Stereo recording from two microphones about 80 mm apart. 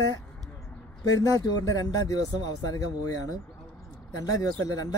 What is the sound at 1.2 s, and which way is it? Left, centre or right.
Speech, left.